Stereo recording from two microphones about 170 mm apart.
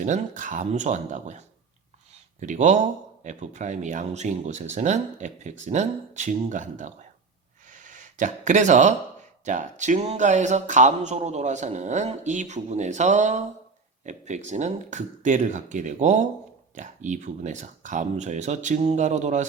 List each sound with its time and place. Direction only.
0.0 s speech: 45° right (ahead or behind)
7.7 s a sound: 50° right (ahead or behind)
9.4 s speech: 45° right (ahead or behind)